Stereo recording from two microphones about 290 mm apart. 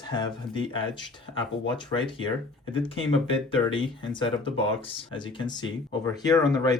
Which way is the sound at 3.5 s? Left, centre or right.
Centre.